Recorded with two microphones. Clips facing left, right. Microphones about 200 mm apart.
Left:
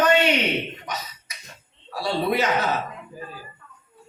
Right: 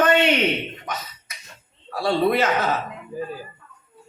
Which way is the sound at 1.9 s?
50° right (ahead or behind).